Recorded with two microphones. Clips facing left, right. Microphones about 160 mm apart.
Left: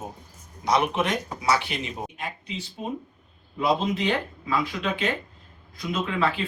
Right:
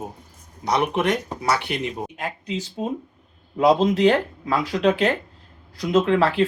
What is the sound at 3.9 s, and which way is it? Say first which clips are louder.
Speech: right 8 dB; 80° right.